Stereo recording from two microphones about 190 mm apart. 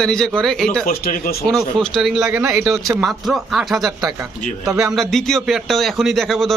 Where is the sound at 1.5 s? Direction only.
5° left (ahead or behind).